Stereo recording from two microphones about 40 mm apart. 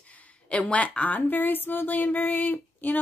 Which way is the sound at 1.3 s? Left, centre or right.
Left.